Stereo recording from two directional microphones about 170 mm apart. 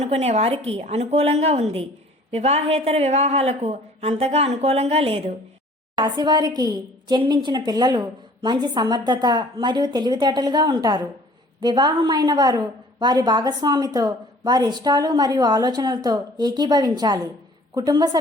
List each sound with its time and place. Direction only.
0.0 s a woman's voice: 40° right (ahead or behind)
6.0 s a woman's voice: 25° right (ahead or behind)